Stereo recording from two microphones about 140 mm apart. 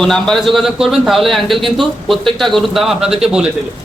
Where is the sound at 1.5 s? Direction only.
35° right (ahead or behind).